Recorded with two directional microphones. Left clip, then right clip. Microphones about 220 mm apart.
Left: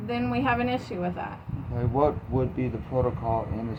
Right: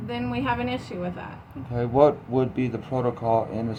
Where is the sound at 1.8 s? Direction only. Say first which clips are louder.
Right 6 dB; 45° right (ahead or behind).